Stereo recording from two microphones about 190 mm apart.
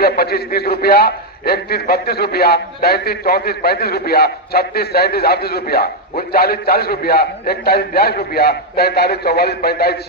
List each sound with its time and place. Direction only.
0.0 s a man's voice: 55° left (ahead or behind)